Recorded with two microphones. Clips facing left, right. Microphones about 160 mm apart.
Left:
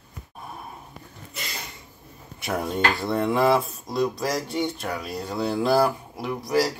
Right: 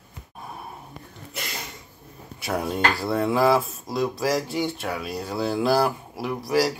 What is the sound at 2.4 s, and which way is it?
Speech, centre (ahead or behind).